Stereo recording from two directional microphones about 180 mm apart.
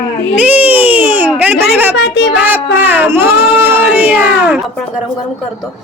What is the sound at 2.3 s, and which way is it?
Speech, 10° right (ahead or behind).